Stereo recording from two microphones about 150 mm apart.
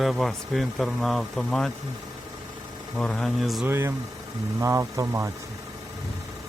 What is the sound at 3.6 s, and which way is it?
Speech, 15° right (ahead or behind).